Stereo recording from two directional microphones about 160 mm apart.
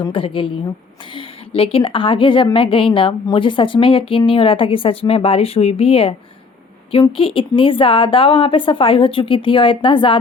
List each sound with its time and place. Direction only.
0.0 s a woman's voice: 35° left (ahead or behind)
7.2 s a woman's voice: 35° left (ahead or behind)